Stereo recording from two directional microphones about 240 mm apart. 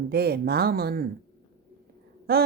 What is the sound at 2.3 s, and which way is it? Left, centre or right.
Speech, right.